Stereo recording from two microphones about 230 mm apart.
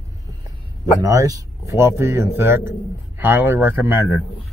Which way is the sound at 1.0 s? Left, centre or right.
Centre.